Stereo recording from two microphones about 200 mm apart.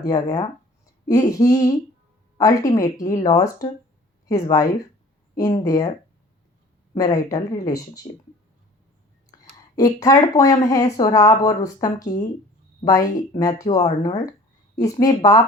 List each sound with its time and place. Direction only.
0.0 s speech: 20° left (ahead or behind)
6.9 s speech: 20° left (ahead or behind)
9.4 s speech: 15° left (ahead or behind)